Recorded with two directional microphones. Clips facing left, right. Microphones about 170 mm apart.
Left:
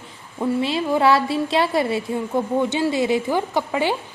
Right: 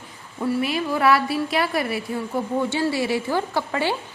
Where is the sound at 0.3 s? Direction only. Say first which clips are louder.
Left 2 dB; 20° left (ahead or behind).